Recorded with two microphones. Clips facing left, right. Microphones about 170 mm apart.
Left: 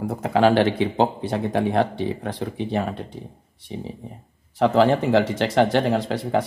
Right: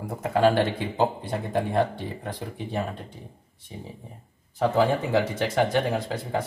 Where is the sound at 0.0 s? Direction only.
80° left.